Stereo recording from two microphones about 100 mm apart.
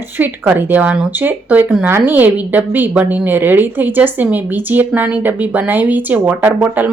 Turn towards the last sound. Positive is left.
turn(degrees=-15)  # may be behind; listen again after turning